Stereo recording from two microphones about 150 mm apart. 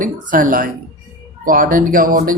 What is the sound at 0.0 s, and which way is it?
Speech, 65° right (ahead or behind).